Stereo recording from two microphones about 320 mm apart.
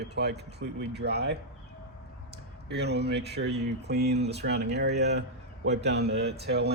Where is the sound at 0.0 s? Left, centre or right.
Right.